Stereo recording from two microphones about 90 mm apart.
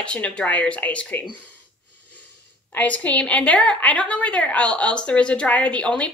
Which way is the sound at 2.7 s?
15° left (ahead or behind).